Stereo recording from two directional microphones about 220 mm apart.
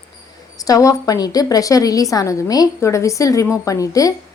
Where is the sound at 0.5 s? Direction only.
15° left (ahead or behind).